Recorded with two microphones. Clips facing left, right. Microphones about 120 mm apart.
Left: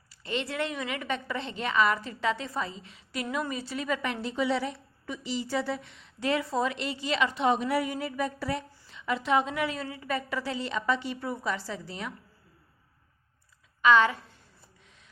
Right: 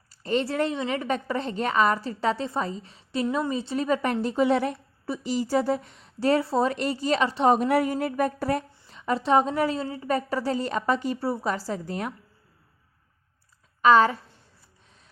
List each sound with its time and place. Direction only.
0.1 s a woman's voice: 40° right (ahead or behind)
7.5 s a woman's voice: 45° right (ahead or behind)
13.8 s a woman's voice: 40° right (ahead or behind)